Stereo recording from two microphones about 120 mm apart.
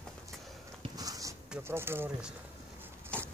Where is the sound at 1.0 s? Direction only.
30° right (ahead or behind).